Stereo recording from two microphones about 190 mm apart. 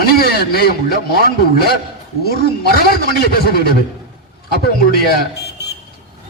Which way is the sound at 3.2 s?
55° left (ahead or behind).